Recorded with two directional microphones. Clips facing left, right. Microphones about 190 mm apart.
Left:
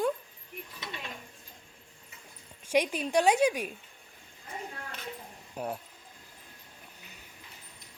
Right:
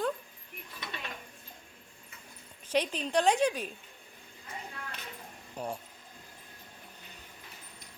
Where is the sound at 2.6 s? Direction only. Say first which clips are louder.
Left 3 dB; 10° left (ahead or behind).